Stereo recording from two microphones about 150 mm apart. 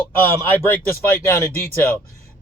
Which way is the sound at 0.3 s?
15° left (ahead or behind).